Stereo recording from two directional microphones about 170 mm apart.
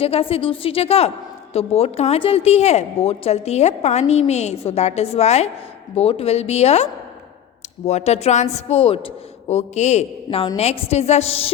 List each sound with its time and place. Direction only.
0.0 s a woman's voice: 35° left (ahead or behind)
7.9 s a woman's voice: 40° left (ahead or behind)
10.2 s a woman's voice: 25° left (ahead or behind)